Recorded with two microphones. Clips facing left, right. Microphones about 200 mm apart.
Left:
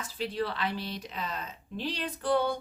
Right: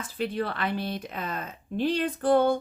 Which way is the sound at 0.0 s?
55° right (ahead or behind).